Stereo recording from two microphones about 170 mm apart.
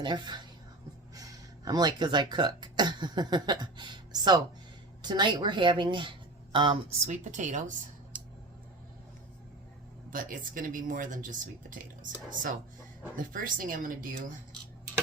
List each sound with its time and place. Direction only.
0.0 s speech: 25° right (ahead or behind)
7.1 s speech: 45° right (ahead or behind)
10.1 s speech: 55° right (ahead or behind)
13.1 s speech: 50° right (ahead or behind)